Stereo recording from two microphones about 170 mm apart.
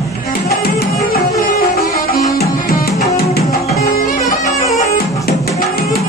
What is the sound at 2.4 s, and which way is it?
Music, 65° left (ahead or behind).